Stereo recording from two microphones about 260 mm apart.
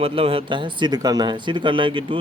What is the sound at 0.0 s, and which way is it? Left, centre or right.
Speech, right.